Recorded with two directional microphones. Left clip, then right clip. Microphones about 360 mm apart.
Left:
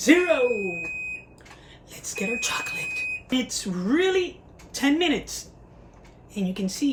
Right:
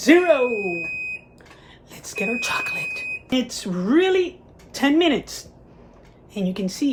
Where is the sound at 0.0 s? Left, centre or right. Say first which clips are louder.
Right 4 dB; centre.